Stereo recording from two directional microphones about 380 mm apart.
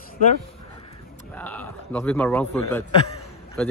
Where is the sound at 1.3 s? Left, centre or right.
Centre.